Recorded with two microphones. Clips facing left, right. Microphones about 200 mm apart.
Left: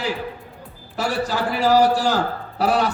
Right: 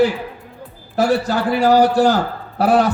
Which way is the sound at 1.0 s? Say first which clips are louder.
Right 6 dB; 55° right (ahead or behind).